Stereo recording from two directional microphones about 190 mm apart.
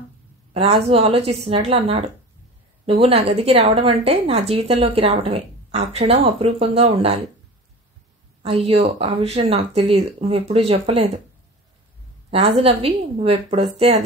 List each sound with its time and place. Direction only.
0.5 s a woman's voice: 30° right (ahead or behind)
8.4 s a woman's voice: 30° right (ahead or behind)
12.3 s a woman's voice: 30° right (ahead or behind)